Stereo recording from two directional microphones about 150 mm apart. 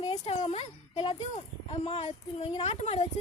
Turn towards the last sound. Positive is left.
turn(degrees=45)  # may be behind; listen again after turning